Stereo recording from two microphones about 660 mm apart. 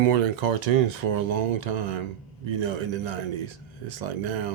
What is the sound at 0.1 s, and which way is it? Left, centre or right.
Speech, right.